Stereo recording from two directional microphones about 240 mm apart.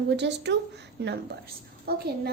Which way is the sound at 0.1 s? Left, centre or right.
Right.